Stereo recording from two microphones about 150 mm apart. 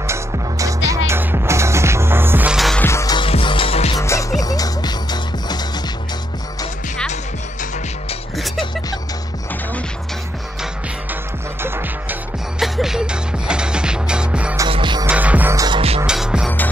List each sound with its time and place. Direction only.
0.0 s music: 20° right (ahead or behind); by 2.8 s centre (ahead or behind)
2.8 s music: 20° left (ahead or behind)
3.2 s music: 35° left (ahead or behind)
3.9 s music: 20° left (ahead or behind)
11.6 s music: 15° right (ahead or behind)
12.5 s music: centre (ahead or behind)
14.7 s music: 30° right (ahead or behind)
15.0 s music: 10° right (ahead or behind)
15.5 s music: 25° right (ahead or behind)
16.1 s music: 5° right (ahead or behind)